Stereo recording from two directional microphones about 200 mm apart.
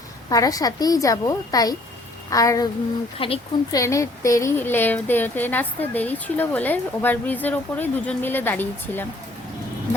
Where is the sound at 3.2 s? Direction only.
25° left (ahead or behind).